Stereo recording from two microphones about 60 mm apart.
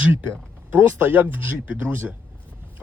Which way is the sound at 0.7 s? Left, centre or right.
Right.